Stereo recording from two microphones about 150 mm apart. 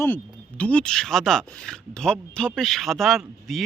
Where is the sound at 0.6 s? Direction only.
5° left (ahead or behind).